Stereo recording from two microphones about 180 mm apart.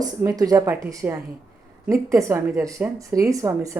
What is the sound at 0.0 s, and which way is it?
Speech, 20° right (ahead or behind).